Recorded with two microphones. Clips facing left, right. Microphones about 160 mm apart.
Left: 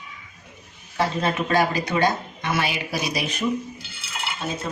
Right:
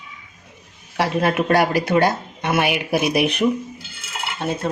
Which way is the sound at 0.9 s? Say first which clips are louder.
Right 4 dB; 75° right (ahead or behind).